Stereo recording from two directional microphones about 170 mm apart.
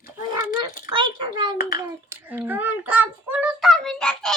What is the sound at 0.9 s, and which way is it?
Speech, 30° right (ahead or behind).